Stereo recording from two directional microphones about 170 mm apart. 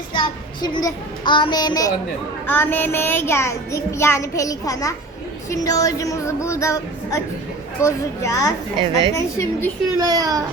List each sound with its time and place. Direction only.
0.1 s child singing: 30° left (ahead or behind)
2.5 s child singing: 10° left (ahead or behind)
8.8 s a child's voice: 30° right (ahead or behind)
9.1 s child singing: 10° left (ahead or behind)
9.9 s a child's voice: 20° right (ahead or behind)